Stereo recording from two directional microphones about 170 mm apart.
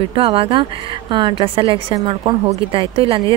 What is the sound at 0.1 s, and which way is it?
Speech, 30° right (ahead or behind).